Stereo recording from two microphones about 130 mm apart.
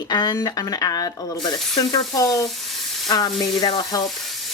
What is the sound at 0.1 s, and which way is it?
Speech, 30° left (ahead or behind).